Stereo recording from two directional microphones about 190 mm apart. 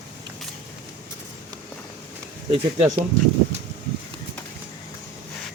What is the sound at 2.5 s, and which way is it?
Speech, 30° right (ahead or behind).